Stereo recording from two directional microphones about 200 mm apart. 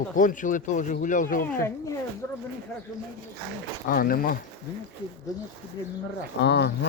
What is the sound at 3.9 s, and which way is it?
Speech, 45° left (ahead or behind).